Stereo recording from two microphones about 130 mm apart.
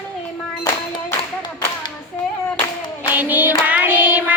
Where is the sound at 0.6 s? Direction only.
35° left (ahead or behind).